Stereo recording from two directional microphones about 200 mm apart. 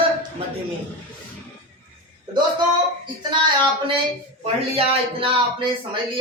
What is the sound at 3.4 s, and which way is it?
A man's voice, 25° right (ahead or behind).